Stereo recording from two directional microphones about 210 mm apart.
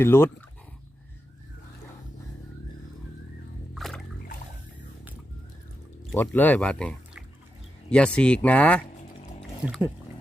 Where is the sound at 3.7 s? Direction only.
Centre (ahead or behind).